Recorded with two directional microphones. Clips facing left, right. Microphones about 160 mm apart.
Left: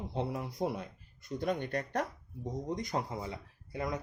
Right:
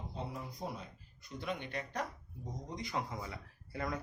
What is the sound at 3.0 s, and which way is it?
Speech, 25° left (ahead or behind).